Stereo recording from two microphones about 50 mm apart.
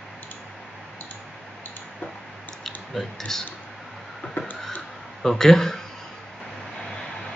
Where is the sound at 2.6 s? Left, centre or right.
Centre.